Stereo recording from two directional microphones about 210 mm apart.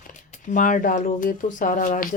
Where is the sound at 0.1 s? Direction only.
35° left (ahead or behind).